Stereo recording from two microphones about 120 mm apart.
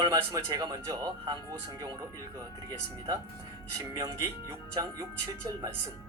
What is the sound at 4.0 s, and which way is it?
Speech, 30° right (ahead or behind).